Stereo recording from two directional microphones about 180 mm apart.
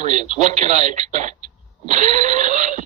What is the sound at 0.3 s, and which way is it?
Speech, 40° right (ahead or behind).